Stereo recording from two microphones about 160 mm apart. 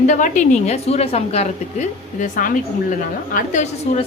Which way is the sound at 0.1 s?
50° left (ahead or behind).